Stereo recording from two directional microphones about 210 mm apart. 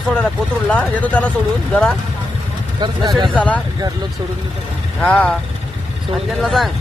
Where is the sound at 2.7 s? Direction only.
20° right (ahead or behind).